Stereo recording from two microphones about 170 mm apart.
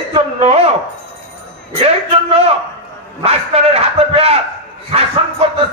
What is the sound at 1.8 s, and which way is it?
A man's voice, 35° right (ahead or behind).